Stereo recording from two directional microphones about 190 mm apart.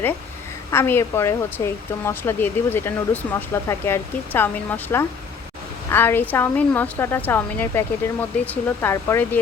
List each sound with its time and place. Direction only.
0.7 s speech: 10° left (ahead or behind)